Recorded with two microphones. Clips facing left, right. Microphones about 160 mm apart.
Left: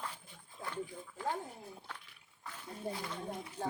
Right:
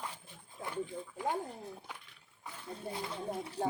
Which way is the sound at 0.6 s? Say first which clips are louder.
Right 3 dB; 15° right (ahead or behind).